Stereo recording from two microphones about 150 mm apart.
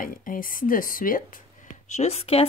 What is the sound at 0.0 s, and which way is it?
Speech, 65° left (ahead or behind).